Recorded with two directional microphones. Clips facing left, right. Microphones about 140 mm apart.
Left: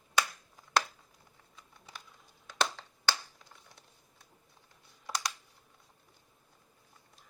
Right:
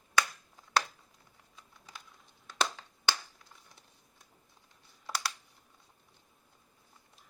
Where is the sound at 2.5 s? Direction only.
10° right (ahead or behind).